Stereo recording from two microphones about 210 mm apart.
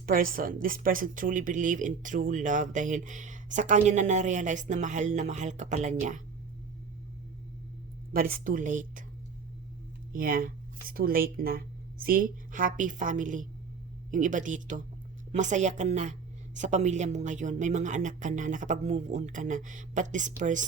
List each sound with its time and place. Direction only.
0.0 s speech: 45° right (ahead or behind)
8.1 s speech: 45° right (ahead or behind)
10.1 s speech: 40° right (ahead or behind)